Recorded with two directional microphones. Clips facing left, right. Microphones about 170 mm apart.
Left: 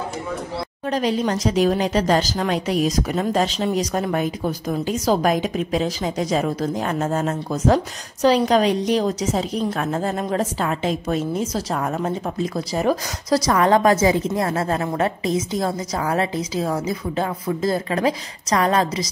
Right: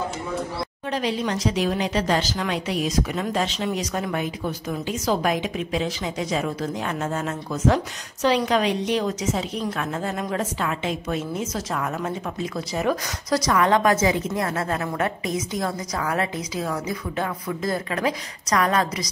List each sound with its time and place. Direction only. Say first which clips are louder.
0.8 s speech: left 5 dB; 40° left (ahead or behind)